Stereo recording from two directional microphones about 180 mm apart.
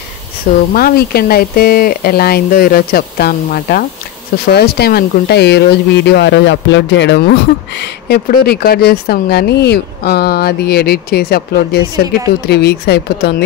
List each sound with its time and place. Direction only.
0.5 s speech: 55° left (ahead or behind)